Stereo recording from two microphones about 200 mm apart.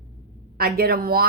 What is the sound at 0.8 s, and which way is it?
Speech, 50° right (ahead or behind).